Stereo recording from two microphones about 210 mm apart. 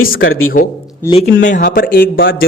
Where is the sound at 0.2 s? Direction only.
75° left (ahead or behind).